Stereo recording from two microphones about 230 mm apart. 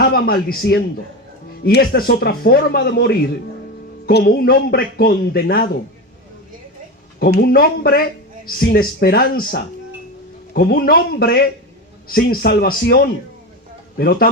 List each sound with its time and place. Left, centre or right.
0.0 s a man's voice: left
7.2 s a man's voice: left